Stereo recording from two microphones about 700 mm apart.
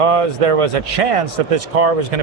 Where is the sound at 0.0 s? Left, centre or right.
Right.